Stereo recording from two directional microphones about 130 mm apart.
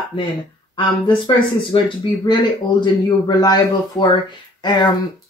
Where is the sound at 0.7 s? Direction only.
40° left (ahead or behind).